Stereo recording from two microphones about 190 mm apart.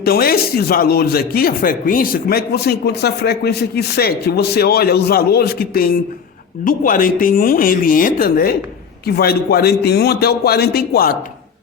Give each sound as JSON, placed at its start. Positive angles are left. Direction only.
{"t": 0.0, "sound": "speech", "side_deg": 55}